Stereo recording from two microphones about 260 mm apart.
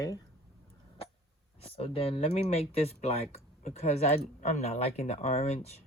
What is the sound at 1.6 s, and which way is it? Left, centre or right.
Speech, left.